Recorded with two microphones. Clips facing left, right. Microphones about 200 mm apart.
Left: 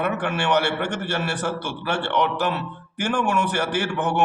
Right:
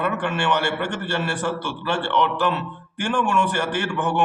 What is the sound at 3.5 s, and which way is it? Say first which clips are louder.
Speech: even; 10° left (ahead or behind).